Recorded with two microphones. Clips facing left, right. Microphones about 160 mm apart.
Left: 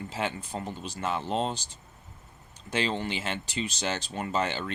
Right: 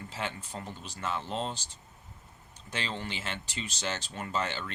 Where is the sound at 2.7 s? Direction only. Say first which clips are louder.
Left 7 dB; 20° left (ahead or behind).